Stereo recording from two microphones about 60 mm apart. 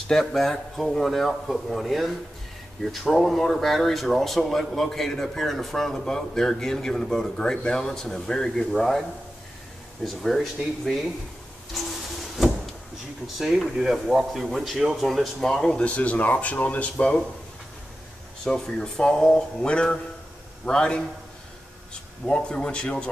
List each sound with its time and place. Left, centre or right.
0.1 s speech: centre
10.0 s speech: centre
11.7 s a sound: centre
13.4 s speech: centre
15.8 s speech: left
18.4 s speech: centre
22.2 s speech: centre